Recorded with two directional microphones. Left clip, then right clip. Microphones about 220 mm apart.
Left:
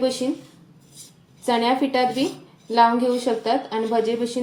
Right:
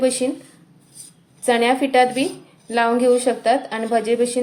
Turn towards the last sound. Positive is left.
turn(degrees=-50)  # may be behind; listen again after turning